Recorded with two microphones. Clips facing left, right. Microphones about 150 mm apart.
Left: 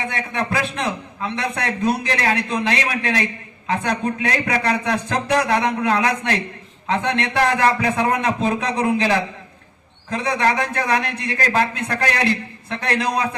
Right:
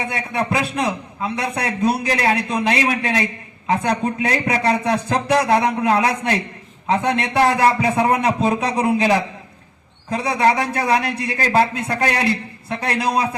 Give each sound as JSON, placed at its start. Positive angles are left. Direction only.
{"t": 0.1, "sound": "a man's voice", "side_deg": -20}